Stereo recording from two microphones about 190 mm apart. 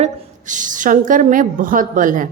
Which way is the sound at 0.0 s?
40° right (ahead or behind).